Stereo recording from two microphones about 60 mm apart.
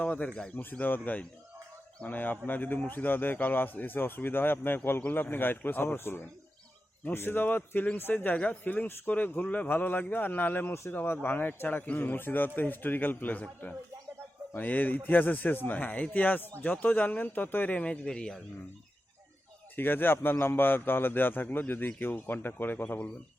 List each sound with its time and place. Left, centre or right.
0.0 s speech: left
0.5 s a man's voice: left; by 18.4 s centre
19.7 s a man's voice: left